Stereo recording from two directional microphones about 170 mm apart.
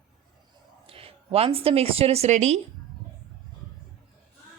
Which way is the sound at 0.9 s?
35° right (ahead or behind).